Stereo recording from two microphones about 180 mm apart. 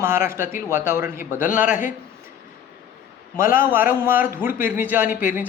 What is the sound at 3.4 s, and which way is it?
Speech, 50° left (ahead or behind).